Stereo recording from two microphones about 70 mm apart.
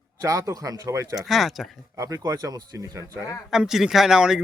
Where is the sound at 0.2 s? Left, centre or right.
Right.